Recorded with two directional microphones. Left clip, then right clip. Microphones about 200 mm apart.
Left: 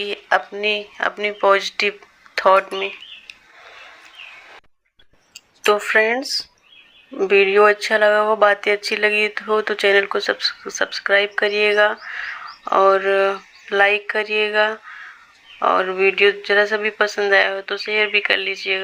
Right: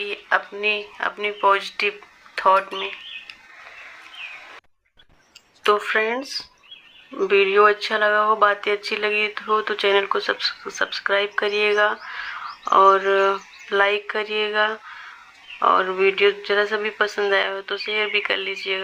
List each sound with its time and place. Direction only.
0.0 s speech: 25° left (ahead or behind)
5.6 s speech: 15° left (ahead or behind)